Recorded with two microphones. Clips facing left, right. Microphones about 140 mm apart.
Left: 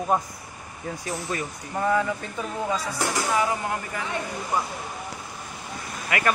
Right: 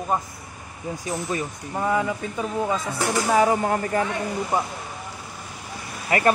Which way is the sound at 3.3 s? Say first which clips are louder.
Right 8 dB; 40° right (ahead or behind).